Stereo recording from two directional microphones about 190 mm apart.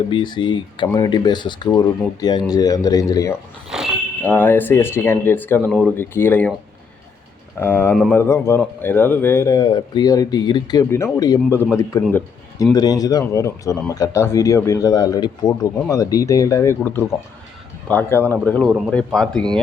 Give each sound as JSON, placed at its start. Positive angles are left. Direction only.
{"t": 0.1, "sound": "speech", "side_deg": 25}
{"t": 3.7, "sound": "a sound", "side_deg": -5}
{"t": 4.3, "sound": "speech", "side_deg": 10}
{"t": 7.6, "sound": "speech", "side_deg": 10}